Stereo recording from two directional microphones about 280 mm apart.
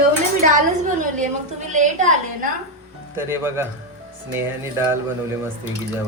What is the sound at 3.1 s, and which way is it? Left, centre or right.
Speech, centre.